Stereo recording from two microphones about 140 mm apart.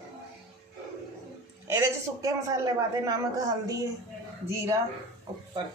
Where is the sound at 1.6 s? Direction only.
25° right (ahead or behind).